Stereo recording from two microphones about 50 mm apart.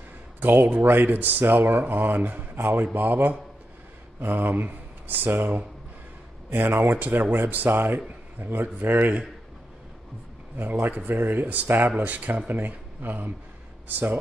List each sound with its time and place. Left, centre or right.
0.4 s a man's voice: right
10.6 s a man's voice: right
12.0 s a man's voice: right